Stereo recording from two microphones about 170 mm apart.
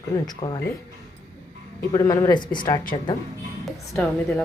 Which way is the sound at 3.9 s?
5° left (ahead or behind).